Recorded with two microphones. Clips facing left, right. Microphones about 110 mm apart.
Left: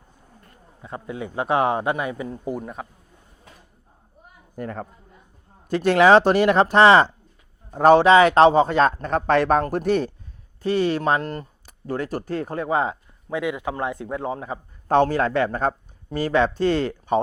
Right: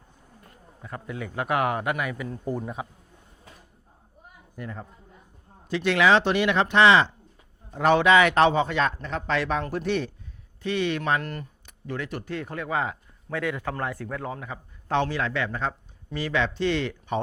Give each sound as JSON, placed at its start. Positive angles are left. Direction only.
{"t": 0.8, "sound": "speech", "side_deg": 20}
{"t": 2.8, "sound": "a man's voice", "side_deg": -10}
{"t": 4.6, "sound": "a man's voice", "side_deg": 45}
{"t": 13.3, "sound": "speech", "side_deg": 15}
{"t": 14.8, "sound": "speech", "side_deg": 45}